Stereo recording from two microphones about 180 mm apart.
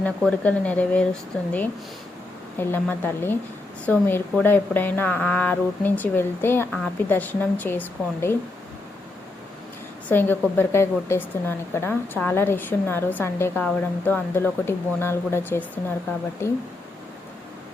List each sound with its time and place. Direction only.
0.2 s a woman's voice: 5° left (ahead or behind)
2.6 s a woman's voice: 10° left (ahead or behind)
10.1 s a woman's voice: 10° left (ahead or behind)